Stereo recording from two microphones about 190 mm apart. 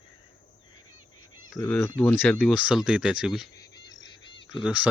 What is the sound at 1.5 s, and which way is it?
Speech, 15° left (ahead or behind).